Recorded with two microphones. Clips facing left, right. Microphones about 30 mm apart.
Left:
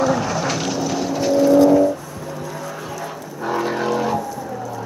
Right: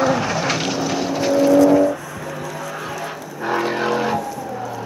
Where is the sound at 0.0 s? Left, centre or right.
Right.